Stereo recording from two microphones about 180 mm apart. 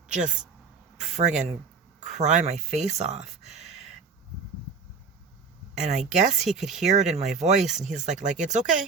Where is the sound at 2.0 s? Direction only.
40° right (ahead or behind).